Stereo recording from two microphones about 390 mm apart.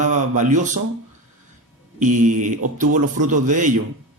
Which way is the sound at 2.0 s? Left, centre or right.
Centre.